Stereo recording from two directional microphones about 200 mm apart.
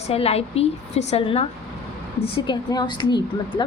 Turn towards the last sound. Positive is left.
turn(degrees=20)  # may be behind; listen again after turning